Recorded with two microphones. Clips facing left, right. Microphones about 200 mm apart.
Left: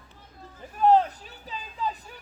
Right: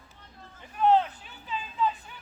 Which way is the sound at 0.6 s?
40° left (ahead or behind).